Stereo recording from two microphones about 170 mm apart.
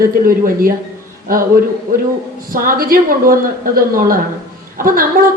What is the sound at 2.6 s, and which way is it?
Speech, 60° right (ahead or behind).